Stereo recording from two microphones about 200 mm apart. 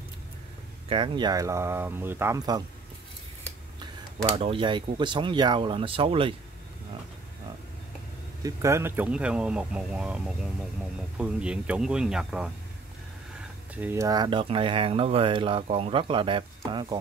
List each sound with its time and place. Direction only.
0.8 s speech: 25° right (ahead or behind)
3.8 s speech: 25° right (ahead or behind)
8.4 s speech: 15° right (ahead or behind)
13.7 s speech: 10° right (ahead or behind)